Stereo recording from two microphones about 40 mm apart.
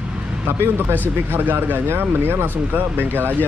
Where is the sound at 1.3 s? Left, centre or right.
Right.